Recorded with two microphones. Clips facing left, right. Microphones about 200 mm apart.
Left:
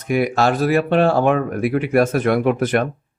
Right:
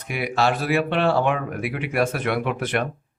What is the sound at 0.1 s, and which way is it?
Speech, 45° left (ahead or behind).